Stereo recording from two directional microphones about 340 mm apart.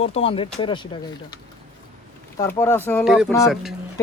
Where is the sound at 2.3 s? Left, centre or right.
Centre.